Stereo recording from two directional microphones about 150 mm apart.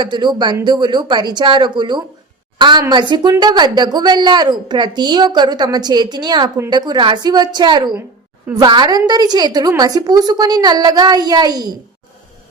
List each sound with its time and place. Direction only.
0.0 s a woman's voice: 30° right (ahead or behind)